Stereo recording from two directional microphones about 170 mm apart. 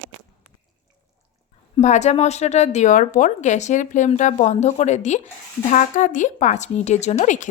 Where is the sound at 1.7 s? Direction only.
45° left (ahead or behind).